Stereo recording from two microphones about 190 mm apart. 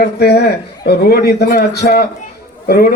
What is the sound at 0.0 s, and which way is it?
A man's voice, 60° left (ahead or behind).